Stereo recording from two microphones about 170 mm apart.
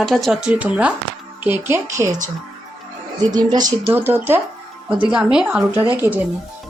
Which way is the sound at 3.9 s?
10° right (ahead or behind).